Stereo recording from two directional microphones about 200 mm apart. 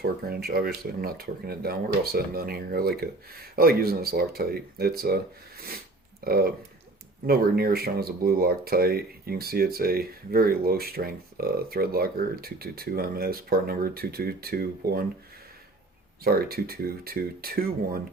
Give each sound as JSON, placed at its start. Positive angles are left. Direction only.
{"t": 0.0, "sound": "speech", "side_deg": -50}
{"t": 16.2, "sound": "speech", "side_deg": -50}